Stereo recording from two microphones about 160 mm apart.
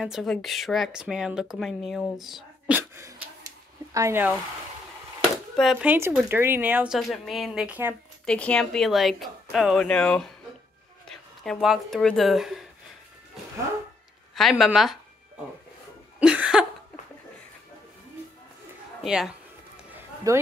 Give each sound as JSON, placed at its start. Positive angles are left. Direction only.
{"t": 0.0, "sound": "speech", "side_deg": 0}
{"t": 2.7, "sound": "a sound", "side_deg": -20}
{"t": 3.9, "sound": "a woman's voice", "side_deg": -15}
{"t": 5.6, "sound": "speech", "side_deg": 0}
{"t": 5.9, "sound": "a woman's voice", "side_deg": -10}
{"t": 8.3, "sound": "speech", "side_deg": 5}
{"t": 14.3, "sound": "speech", "side_deg": 0}
{"t": 16.2, "sound": "cough", "side_deg": -5}
{"t": 19.0, "sound": "speech", "side_deg": -5}
{"t": 19.9, "sound": "run", "side_deg": -15}